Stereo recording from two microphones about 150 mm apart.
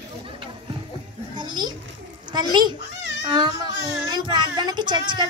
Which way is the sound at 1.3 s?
30° right (ahead or behind).